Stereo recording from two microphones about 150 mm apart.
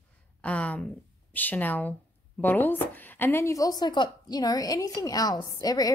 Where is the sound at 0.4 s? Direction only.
10° left (ahead or behind).